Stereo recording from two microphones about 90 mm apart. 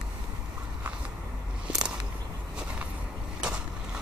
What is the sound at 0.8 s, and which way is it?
Vehicle, 15° right (ahead or behind).